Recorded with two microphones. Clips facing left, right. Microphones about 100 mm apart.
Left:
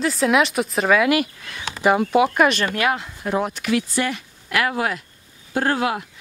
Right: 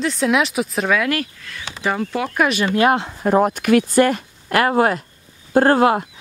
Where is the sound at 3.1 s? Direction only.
45° right (ahead or behind).